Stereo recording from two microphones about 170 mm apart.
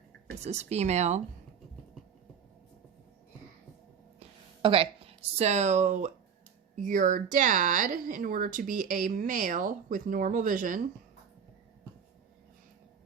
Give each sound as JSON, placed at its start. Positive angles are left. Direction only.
{"t": 0.3, "sound": "speech", "side_deg": -40}
{"t": 4.6, "sound": "speech", "side_deg": -30}